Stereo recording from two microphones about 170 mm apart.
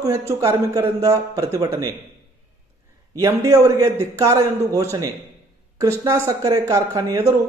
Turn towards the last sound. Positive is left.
turn(degrees=-15)  # may be behind; listen again after turning